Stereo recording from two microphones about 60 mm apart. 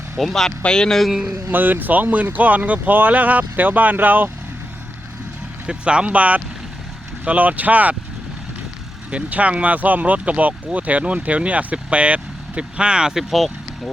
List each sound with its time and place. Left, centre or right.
0.2 s speech: centre
1.0 s speech: centre
1.5 s speech: right
5.6 s speech: centre
9.0 s speech: right; by 13.9 s centre